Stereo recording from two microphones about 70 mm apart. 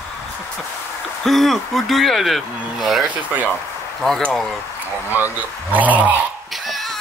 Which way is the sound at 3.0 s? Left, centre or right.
Right.